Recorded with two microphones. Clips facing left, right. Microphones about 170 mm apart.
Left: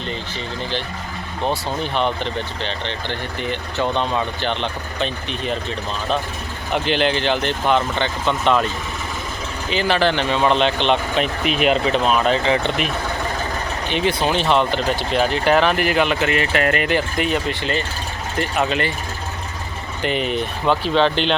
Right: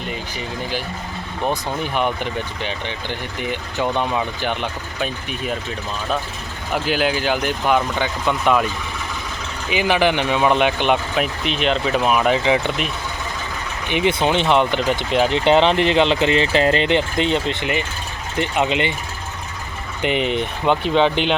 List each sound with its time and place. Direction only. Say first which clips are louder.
1.5 s speech: even; 10° right (ahead or behind)
6.7 s speech: left 1 dB; 5° right (ahead or behind)
9.6 s speech: right 1 dB; 15° right (ahead or behind)
11.4 s speech: left 5 dB; 5° left (ahead or behind)
11.9 s speech: even; 10° right (ahead or behind)
13.9 s speech: right 2 dB; 20° right (ahead or behind)
20.0 s speech: right 1 dB; 20° right (ahead or behind)